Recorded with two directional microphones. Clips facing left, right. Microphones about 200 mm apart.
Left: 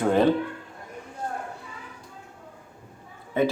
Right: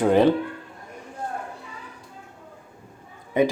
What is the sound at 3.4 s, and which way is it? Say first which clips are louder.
Speech: right 3 dB; 15° right (ahead or behind).